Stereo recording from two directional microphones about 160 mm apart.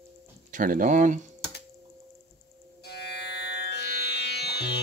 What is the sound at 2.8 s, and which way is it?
Music, 90° left.